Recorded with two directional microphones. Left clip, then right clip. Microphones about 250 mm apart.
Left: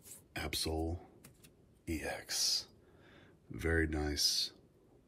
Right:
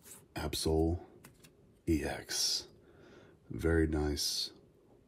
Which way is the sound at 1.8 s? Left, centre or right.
Right.